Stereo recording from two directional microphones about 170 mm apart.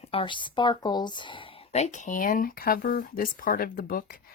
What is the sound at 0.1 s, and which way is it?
Speech, 30° left (ahead or behind).